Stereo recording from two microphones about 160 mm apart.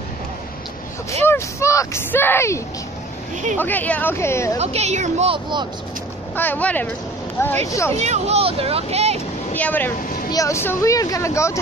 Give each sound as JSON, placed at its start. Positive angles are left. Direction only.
{"t": 1.2, "sound": "speech", "side_deg": 15}
{"t": 4.6, "sound": "speech", "side_deg": -45}
{"t": 6.3, "sound": "speech", "side_deg": 10}
{"t": 8.0, "sound": "speech", "side_deg": -45}
{"t": 9.5, "sound": "speech", "side_deg": 10}